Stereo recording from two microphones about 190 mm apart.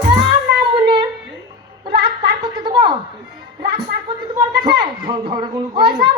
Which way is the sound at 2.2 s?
20° right (ahead or behind).